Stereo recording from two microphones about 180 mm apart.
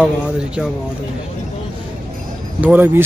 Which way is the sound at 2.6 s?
10° right (ahead or behind).